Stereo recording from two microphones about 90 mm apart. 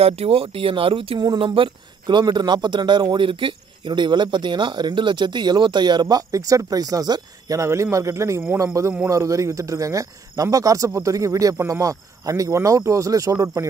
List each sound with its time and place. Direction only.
0.3 s speech: 90° right
1.4 s speech: 75° right (ahead or behind); by 13.7 s 40° right (ahead or behind)